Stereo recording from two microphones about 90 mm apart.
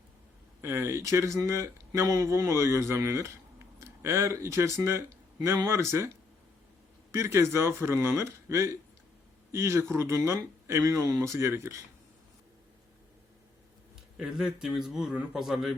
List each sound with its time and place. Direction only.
0.6 s a man's voice: 25° right (ahead or behind)
7.1 s a man's voice: 30° right (ahead or behind)
14.2 s a man's voice: 5° right (ahead or behind)